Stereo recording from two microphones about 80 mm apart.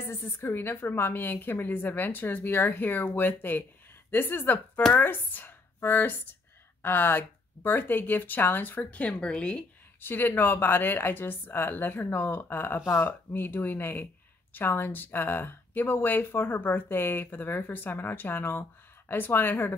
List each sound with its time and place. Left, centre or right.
0.0 s speech: left; by 9.7 s centre
9.9 s speech: left